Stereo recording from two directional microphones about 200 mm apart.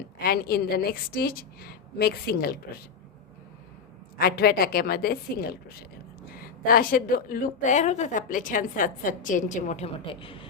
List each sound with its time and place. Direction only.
0.2 s a woman's voice: 50° left (ahead or behind)
4.2 s a woman's voice: 50° left (ahead or behind); by 10.3 s 25° left (ahead or behind)